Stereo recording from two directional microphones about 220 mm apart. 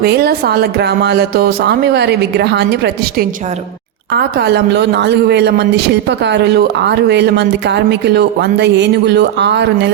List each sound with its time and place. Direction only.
0.0 s speech: 45° right (ahead or behind)